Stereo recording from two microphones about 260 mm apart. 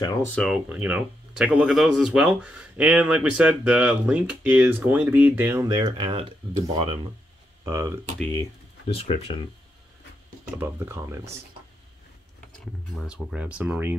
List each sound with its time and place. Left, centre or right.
0.0 s speech: centre
7.6 s speech: centre
8.2 s speech: centre
8.9 s speech: left
10.6 s speech: centre
13.0 s speech: centre